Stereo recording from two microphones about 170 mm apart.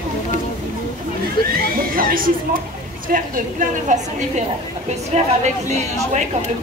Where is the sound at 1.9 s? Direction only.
55° right (ahead or behind).